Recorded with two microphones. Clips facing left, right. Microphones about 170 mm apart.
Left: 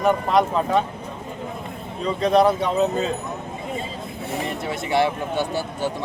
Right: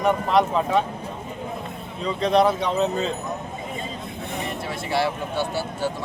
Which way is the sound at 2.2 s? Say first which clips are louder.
Left 2 dB; centre (ahead or behind).